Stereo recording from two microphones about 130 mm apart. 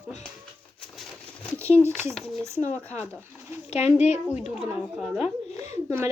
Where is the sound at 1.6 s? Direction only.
20° right (ahead or behind).